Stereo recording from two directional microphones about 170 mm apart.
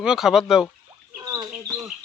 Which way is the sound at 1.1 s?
20° right (ahead or behind).